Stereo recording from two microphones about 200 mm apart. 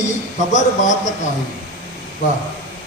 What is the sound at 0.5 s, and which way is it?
Speech, 40° left (ahead or behind).